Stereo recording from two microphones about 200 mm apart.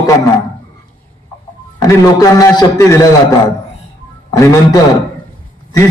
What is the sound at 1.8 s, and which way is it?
A man's voice, 20° left (ahead or behind).